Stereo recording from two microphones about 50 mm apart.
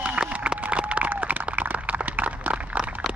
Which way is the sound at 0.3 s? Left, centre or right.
Right.